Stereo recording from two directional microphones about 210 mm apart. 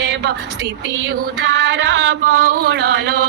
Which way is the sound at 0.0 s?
55° right (ahead or behind).